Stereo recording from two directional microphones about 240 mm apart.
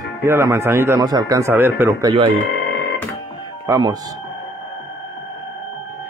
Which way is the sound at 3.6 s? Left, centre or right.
Centre.